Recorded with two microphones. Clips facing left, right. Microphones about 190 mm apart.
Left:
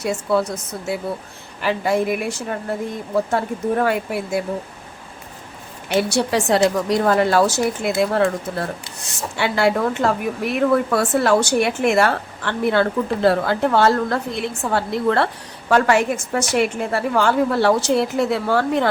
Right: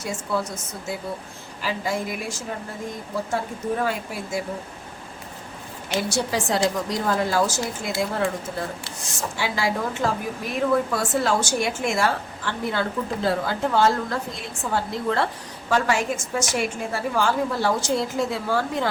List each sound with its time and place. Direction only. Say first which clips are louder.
0.0 s speech: left 7 dB; 65° left (ahead or behind)
6.0 s a woman's voice: left 6 dB; 65° left (ahead or behind)